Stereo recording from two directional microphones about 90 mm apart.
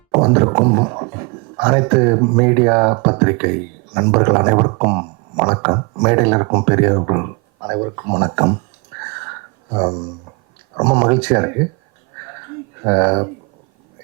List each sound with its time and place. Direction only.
0.3 s speech: 25° right (ahead or behind)
4.9 s a sound: 25° right (ahead or behind)
6.0 s speech: 20° right (ahead or behind)
9.0 s a sound: 25° right (ahead or behind)
10.8 s speech: 15° right (ahead or behind)
12.8 s speech: 20° right (ahead or behind)